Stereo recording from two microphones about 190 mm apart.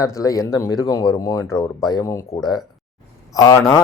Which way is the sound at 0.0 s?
15° left (ahead or behind).